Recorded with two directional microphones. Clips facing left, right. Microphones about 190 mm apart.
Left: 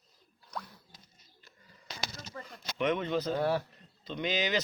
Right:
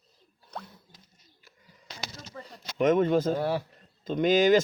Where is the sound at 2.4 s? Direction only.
40° right (ahead or behind).